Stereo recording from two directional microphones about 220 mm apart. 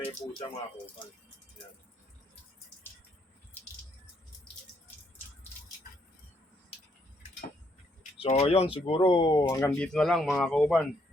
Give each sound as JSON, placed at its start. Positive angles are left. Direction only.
{"t": 8.2, "sound": "speech", "side_deg": 30}
{"t": 9.7, "sound": "speech", "side_deg": 5}